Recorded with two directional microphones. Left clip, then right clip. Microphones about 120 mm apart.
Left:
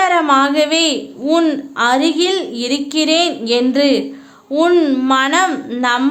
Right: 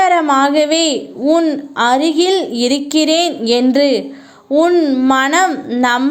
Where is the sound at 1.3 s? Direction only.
15° right (ahead or behind).